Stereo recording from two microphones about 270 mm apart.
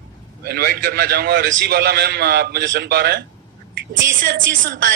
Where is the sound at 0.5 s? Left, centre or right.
Right.